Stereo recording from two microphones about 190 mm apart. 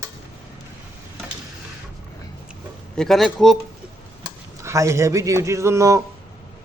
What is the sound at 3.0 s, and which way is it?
Speech, centre (ahead or behind).